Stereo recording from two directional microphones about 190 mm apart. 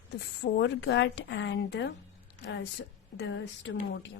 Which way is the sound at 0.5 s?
70° left (ahead or behind).